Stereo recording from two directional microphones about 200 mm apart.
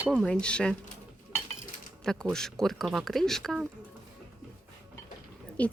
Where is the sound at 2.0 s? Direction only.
5° left (ahead or behind).